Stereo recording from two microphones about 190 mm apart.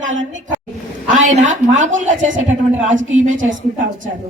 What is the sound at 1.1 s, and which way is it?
A woman's voice, 40° right (ahead or behind).